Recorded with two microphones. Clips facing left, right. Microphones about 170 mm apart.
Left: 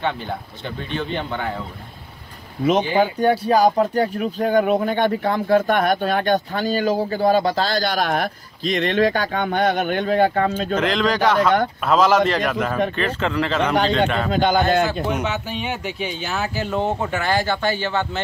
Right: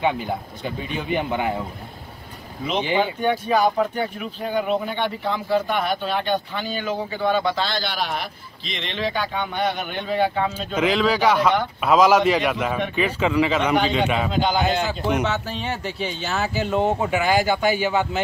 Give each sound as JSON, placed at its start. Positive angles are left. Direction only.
{"t": 0.0, "sound": "speech", "side_deg": -5}
{"t": 2.6, "sound": "speech", "side_deg": 55}
{"t": 3.0, "sound": "speech", "side_deg": 40}
{"t": 10.7, "sound": "speech", "side_deg": -5}
{"t": 14.3, "sound": "speech", "side_deg": 50}
{"t": 15.0, "sound": "speech", "side_deg": 0}